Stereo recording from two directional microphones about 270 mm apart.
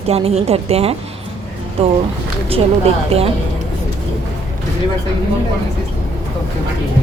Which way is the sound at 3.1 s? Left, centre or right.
Right.